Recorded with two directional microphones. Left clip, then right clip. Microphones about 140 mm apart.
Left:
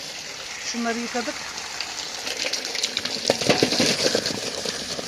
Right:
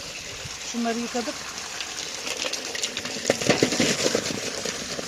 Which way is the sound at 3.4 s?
5° right (ahead or behind).